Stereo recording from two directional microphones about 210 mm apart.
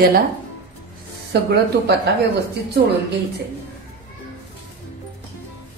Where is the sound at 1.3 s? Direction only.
50° right (ahead or behind).